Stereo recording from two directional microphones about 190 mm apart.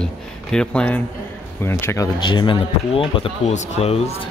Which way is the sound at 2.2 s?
25° left (ahead or behind).